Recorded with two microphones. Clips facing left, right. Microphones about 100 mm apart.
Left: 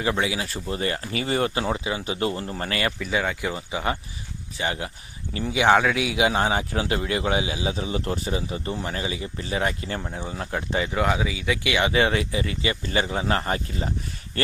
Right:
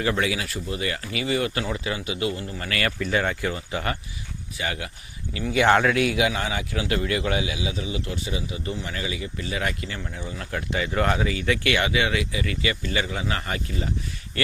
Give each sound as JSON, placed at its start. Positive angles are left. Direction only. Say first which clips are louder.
{"t": 0.0, "sound": "a man's voice", "louder": "even", "side_deg": 20}
{"t": 2.6, "sound": "speech", "louder": "even", "side_deg": 25}
{"t": 3.0, "sound": "speech", "louder": "right 1 dB", "side_deg": 5}
{"t": 4.5, "sound": "speech", "louder": "left 2 dB", "side_deg": 30}
{"t": 5.5, "sound": "speech", "louder": "even", "side_deg": 5}
{"t": 6.1, "sound": "a man's voice", "louder": "left 3 dB", "side_deg": 30}
{"t": 10.9, "sound": "speech", "louder": "right 2 dB", "side_deg": 5}
{"t": 11.9, "sound": "a man's voice", "louder": "left 3 dB", "side_deg": 35}